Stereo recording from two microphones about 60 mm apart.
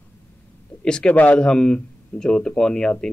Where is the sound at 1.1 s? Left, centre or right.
Left.